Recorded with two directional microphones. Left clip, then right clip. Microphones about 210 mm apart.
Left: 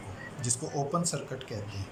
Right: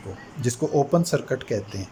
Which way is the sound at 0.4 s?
40° right (ahead or behind).